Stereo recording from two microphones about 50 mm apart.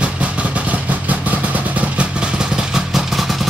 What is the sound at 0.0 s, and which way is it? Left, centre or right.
Vehicle, right.